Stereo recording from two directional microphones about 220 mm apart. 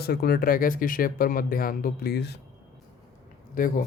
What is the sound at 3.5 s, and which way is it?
Speech, 40° left (ahead or behind).